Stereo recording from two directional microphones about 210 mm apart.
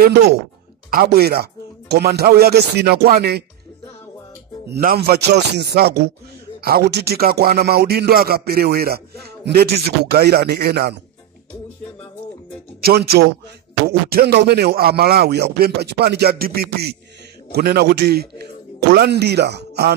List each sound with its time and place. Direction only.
0.0 s speech: 50° right (ahead or behind)
4.7 s speech: 45° right (ahead or behind)
12.8 s speech: 45° right (ahead or behind)